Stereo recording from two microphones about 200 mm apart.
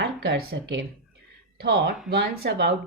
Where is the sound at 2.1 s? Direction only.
55° right (ahead or behind).